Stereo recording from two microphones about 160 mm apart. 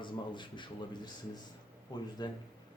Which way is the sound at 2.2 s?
25° left (ahead or behind).